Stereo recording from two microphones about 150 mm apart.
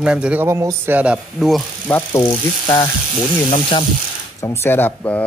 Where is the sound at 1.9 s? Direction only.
15° left (ahead or behind).